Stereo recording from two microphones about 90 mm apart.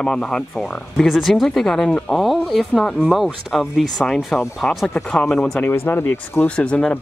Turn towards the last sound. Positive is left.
turn(degrees=10)  # may be behind; listen again after turning